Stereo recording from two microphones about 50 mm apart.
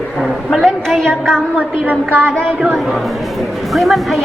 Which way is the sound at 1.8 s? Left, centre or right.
Right.